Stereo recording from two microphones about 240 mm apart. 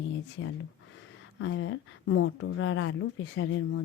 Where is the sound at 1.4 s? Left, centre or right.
Left.